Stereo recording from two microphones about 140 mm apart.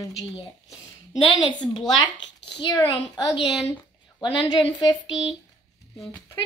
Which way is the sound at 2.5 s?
30° left (ahead or behind).